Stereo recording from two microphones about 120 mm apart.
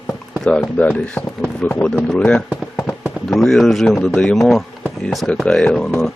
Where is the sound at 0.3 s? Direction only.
5° left (ahead or behind).